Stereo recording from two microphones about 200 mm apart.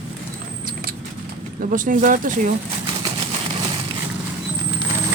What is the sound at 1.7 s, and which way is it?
Speech, 40° right (ahead or behind).